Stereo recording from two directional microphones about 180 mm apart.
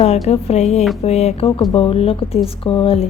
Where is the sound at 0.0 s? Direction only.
35° left (ahead or behind).